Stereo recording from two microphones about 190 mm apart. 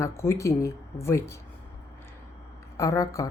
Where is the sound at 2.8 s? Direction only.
15° left (ahead or behind).